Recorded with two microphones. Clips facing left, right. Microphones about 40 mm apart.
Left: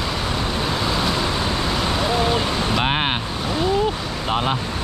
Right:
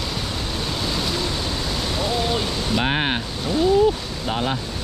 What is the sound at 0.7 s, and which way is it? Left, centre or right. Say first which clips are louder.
Vehicle: left 2 dB; centre.